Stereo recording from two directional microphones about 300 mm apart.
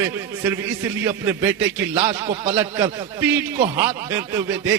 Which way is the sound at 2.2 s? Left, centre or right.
Centre.